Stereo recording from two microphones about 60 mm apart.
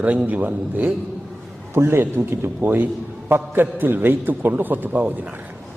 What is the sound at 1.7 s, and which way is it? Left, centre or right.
A man's voice, right.